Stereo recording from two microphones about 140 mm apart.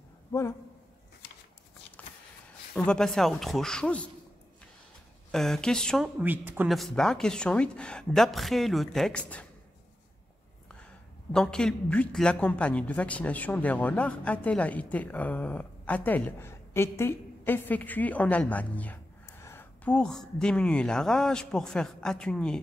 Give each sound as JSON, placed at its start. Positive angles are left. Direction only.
{"t": 0.3, "sound": "a man's voice", "side_deg": 20}
{"t": 2.0, "sound": "a sound", "side_deg": 10}
{"t": 2.7, "sound": "speech", "side_deg": 5}
{"t": 5.3, "sound": "speech", "side_deg": 5}
{"t": 6.1, "sound": "speech", "side_deg": -15}
{"t": 6.7, "sound": "speech", "side_deg": 0}
{"t": 11.3, "sound": "a man's voice", "side_deg": 5}